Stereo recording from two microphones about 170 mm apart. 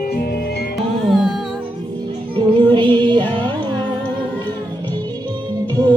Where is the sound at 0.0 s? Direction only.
60° left (ahead or behind).